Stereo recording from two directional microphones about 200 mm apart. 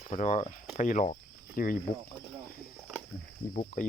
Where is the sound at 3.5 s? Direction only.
45° left (ahead or behind).